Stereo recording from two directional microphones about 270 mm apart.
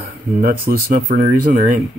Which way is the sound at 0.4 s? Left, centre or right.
Right.